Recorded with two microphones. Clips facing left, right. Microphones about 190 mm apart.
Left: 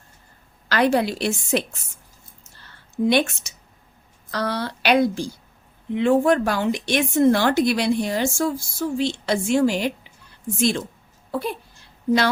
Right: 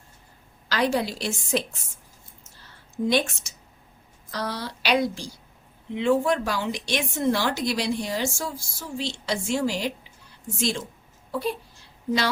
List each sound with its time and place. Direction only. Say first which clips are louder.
0.7 s speech: left 5 dB; 60° left (ahead or behind)
3.1 s speech: left 4 dB; 65° left (ahead or behind)